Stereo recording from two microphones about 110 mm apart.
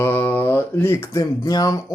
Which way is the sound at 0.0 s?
20° left (ahead or behind).